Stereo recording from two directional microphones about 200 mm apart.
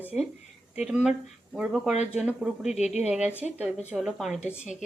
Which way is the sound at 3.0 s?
5° right (ahead or behind).